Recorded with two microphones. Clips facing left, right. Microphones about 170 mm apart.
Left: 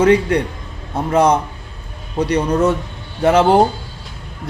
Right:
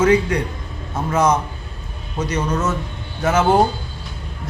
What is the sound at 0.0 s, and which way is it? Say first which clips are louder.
A man's voice: left 3 dB; 30° left (ahead or behind).